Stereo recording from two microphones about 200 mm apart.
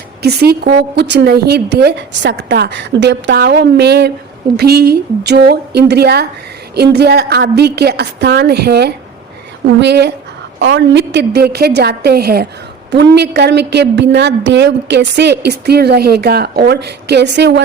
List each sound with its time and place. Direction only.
0.2 s a woman's voice: 55° right (ahead or behind)